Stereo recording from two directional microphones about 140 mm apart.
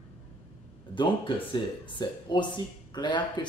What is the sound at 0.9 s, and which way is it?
Speech, 35° left (ahead or behind).